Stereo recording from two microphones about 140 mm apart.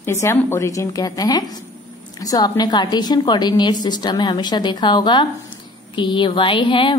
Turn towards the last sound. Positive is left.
turn(degrees=35)  # may be behind; listen again after turning